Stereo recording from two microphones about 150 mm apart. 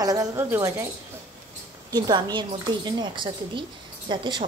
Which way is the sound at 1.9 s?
25° right (ahead or behind).